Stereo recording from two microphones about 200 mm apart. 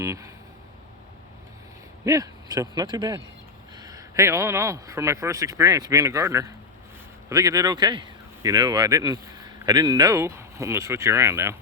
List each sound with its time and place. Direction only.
0.0 s speech: 15° right (ahead or behind)
2.0 s speech: 15° right (ahead or behind)